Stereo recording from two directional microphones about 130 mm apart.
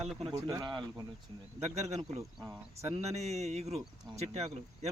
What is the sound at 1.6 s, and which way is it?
Speech, 55° right (ahead or behind).